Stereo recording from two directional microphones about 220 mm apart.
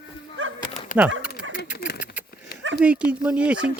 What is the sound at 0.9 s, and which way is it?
Speech, 35° left (ahead or behind).